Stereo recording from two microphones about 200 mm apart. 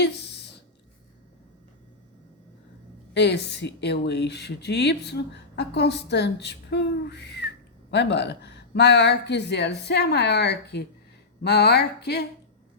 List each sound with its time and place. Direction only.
3.2 s speech: 60° left (ahead or behind)